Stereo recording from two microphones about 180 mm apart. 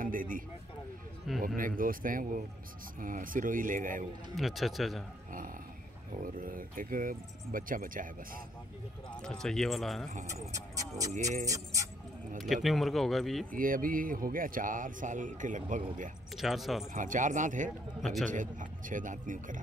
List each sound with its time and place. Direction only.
0.0 s a man's voice: 50° right (ahead or behind)
1.3 s a sound: centre (ahead or behind)
1.6 s speech: 50° right (ahead or behind)
4.4 s speech: centre (ahead or behind)
6.2 s speech: 50° right (ahead or behind)
9.2 s speech: 5° left (ahead or behind)
10.2 s speech: 20° right (ahead or behind)
11.1 s speech: 40° right (ahead or behind)
11.4 s speech: 20° right (ahead or behind)
12.6 s speech: centre (ahead or behind)
13.5 s speech: 50° right (ahead or behind)
16.3 s speech: centre (ahead or behind)
16.9 s speech: 45° right (ahead or behind)